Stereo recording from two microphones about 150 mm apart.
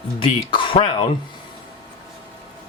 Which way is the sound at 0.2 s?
35° left (ahead or behind).